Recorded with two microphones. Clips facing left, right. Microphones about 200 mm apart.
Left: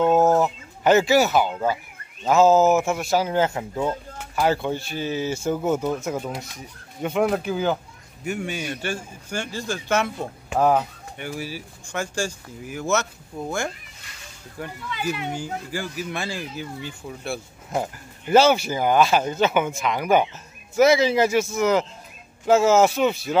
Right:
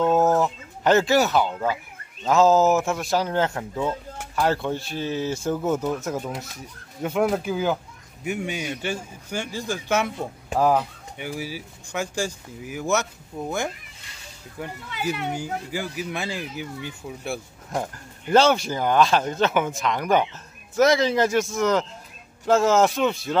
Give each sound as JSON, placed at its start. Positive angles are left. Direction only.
{"t": 0.0, "sound": "speech", "side_deg": 20}
{"t": 0.4, "sound": "speech", "side_deg": 0}
{"t": 8.5, "sound": "speech", "side_deg": -15}
{"t": 10.6, "sound": "speech", "side_deg": 5}
{"t": 11.1, "sound": "speech", "side_deg": -10}
{"t": 15.3, "sound": "speech", "side_deg": -15}
{"t": 17.6, "sound": "speech", "side_deg": 5}